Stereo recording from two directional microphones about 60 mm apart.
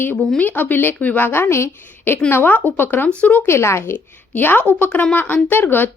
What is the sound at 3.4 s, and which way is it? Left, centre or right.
Speech, left.